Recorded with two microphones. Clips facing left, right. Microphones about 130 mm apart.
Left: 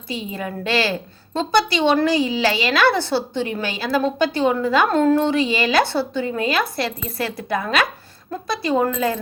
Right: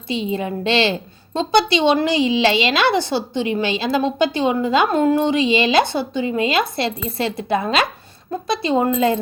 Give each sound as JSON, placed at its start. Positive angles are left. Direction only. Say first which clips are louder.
{"t": 0.1, "sound": "a woman's voice", "louder": "right 5 dB", "side_deg": -25}